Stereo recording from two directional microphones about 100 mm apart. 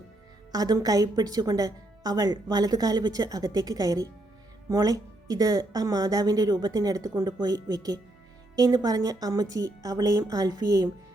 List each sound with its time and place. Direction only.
0.5 s speech: 40° right (ahead or behind)